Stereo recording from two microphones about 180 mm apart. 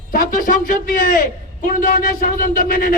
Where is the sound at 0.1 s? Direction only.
50° left (ahead or behind).